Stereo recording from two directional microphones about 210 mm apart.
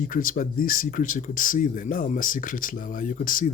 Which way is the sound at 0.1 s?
40° left (ahead or behind).